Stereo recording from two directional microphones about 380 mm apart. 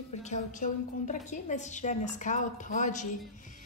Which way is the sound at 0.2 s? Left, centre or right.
Centre.